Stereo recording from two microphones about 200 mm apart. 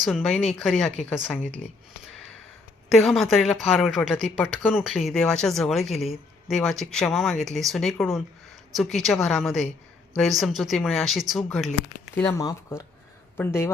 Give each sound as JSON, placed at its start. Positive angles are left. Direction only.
{"t": 0.0, "sound": "a woman's voice", "side_deg": 0}
{"t": 2.9, "sound": "a woman's voice", "side_deg": 0}